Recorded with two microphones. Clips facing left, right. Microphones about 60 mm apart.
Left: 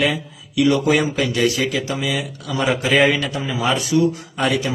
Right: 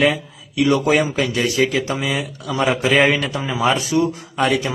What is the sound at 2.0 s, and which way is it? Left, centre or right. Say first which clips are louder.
A man's voice: right 1 dB; right.